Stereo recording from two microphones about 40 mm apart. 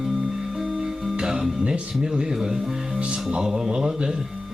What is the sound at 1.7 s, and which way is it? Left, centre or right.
A man's voice, centre.